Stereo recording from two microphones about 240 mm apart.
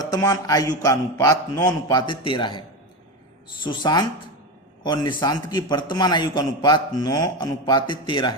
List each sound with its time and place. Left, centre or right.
0.1 s a man's voice: centre